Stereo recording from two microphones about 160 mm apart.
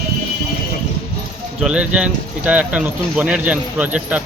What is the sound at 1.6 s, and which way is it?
A man's voice, 5° right (ahead or behind).